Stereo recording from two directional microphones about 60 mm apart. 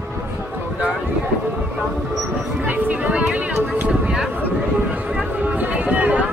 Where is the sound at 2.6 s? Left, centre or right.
Right.